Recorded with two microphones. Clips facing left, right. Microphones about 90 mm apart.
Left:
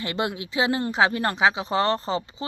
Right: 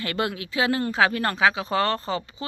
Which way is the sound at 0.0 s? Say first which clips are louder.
Even; 25° left (ahead or behind).